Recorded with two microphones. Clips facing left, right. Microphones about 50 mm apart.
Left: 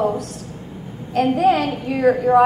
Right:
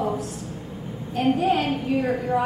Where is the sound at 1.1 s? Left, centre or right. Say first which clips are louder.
Left 5 dB; left.